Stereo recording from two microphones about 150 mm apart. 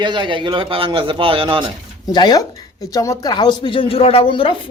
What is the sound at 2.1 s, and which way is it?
A woman's voice, 25° left (ahead or behind).